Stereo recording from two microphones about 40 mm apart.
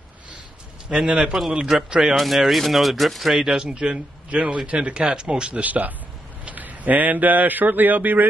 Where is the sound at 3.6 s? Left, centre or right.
Centre.